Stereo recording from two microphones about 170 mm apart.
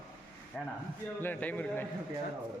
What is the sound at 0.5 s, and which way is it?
A man's voice, 5° left (ahead or behind).